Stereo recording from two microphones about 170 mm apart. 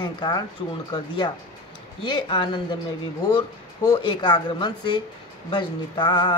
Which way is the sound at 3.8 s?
25° left (ahead or behind).